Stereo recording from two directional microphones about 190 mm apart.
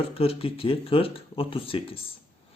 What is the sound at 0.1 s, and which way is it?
Speech, 30° left (ahead or behind).